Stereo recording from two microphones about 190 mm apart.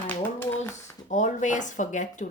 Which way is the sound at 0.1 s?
10° left (ahead or behind).